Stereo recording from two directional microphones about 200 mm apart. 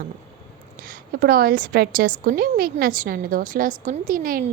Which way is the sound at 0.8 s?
45° right (ahead or behind).